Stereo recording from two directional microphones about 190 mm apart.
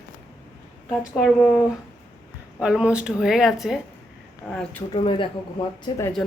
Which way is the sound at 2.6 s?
5° right (ahead or behind).